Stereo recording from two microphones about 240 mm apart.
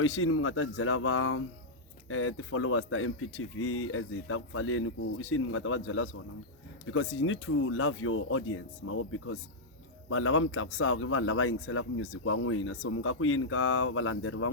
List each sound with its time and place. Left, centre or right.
0.0 s speech: left